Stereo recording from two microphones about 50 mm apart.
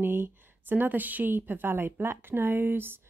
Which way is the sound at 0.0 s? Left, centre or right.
Right.